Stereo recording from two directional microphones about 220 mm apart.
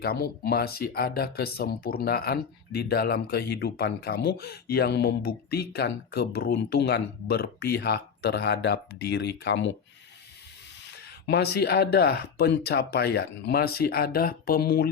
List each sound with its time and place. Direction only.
0.0 s speech: 45° left (ahead or behind)
10.9 s speech: 50° left (ahead or behind)